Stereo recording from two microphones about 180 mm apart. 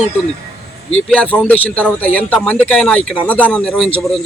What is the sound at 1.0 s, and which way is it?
A man's voice, 5° left (ahead or behind).